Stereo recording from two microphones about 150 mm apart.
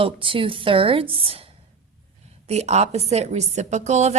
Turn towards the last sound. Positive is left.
turn(degrees=-50)  # may be behind; listen again after turning